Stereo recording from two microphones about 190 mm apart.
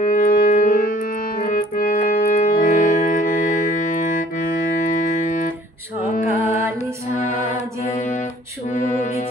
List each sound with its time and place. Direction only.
0.0 s music: 45° left (ahead or behind)
1.4 s keyboard: 45° left (ahead or behind)
7.2 s music: 40° left (ahead or behind)